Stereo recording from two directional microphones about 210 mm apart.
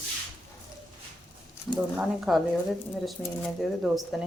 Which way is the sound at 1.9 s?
Centre (ahead or behind).